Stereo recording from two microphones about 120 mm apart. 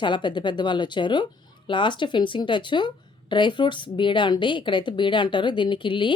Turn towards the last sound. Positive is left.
turn(degrees=45)  # may be behind; listen again after turning